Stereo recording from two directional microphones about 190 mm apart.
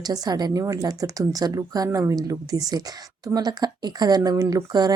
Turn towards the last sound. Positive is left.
turn(degrees=-20)  # may be behind; listen again after turning